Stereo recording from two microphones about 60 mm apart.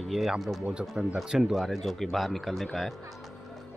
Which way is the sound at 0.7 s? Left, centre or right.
Centre.